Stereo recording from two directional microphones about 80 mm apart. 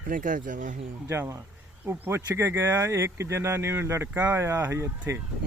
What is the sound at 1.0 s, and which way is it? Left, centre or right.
Speech, right.